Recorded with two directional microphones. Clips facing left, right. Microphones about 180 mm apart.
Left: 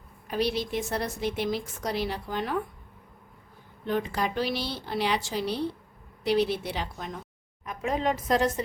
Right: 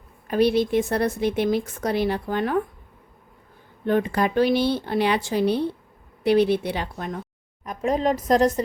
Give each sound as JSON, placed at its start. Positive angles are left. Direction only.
{"t": 0.3, "sound": "a woman's voice", "side_deg": -55}
{"t": 3.8, "sound": "a woman's voice", "side_deg": -55}
{"t": 7.6, "sound": "a woman's voice", "side_deg": -40}